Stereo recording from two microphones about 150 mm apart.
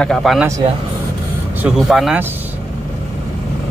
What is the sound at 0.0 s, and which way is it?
Speech, centre (ahead or behind).